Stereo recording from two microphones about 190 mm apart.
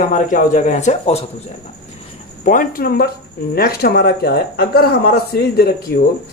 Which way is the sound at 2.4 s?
50° left (ahead or behind).